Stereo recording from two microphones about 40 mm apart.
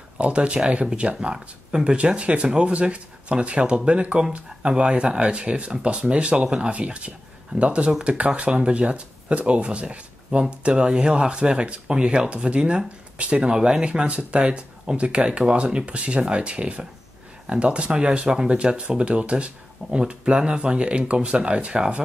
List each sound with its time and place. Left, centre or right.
0.2 s speech: right